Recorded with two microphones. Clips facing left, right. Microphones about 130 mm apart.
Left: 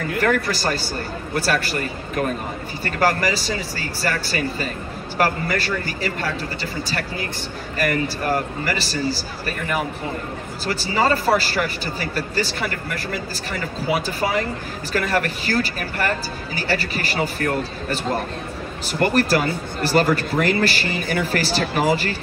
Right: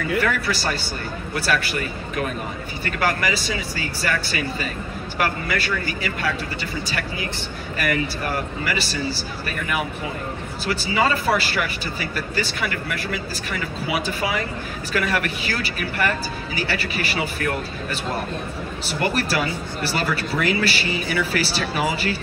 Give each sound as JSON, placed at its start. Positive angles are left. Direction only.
{"t": 0.2, "sound": "speech", "side_deg": 45}